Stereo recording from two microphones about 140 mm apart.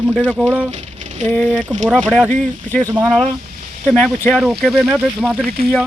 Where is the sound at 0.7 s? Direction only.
55° right (ahead or behind).